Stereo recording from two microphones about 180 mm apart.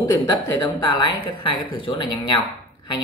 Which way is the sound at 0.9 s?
25° left (ahead or behind).